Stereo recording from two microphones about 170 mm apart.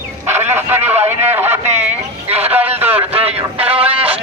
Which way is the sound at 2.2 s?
40° right (ahead or behind).